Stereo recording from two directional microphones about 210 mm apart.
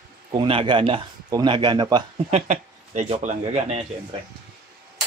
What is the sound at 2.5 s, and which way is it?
Speech, 30° right (ahead or behind).